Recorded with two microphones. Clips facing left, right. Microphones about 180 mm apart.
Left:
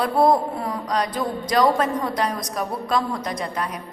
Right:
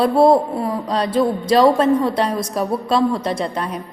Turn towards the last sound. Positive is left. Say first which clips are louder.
# right 5 dB
turn(degrees=-30)  # may be behind; listen again after turning